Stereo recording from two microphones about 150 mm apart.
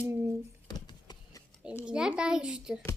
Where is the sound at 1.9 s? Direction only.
5° right (ahead or behind).